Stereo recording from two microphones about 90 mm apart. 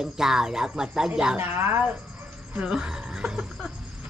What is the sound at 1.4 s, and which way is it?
Speech, 20° right (ahead or behind).